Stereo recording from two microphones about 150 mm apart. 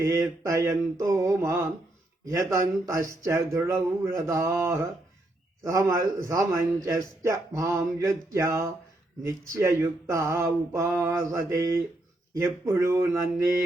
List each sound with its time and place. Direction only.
0.0 s a man's voice: 20° right (ahead or behind)